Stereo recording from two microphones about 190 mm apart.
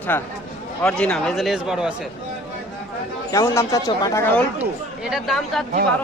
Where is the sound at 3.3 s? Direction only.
15° left (ahead or behind).